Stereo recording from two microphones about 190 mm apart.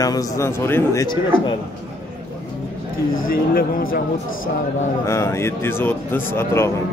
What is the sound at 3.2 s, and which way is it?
Speech, 50° left (ahead or behind).